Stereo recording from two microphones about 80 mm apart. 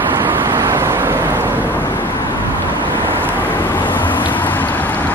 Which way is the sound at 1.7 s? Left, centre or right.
Left.